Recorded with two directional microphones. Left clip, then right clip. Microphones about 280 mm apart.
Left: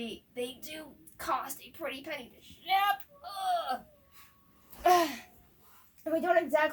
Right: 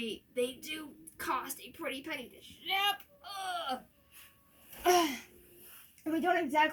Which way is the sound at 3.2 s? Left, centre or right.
Centre.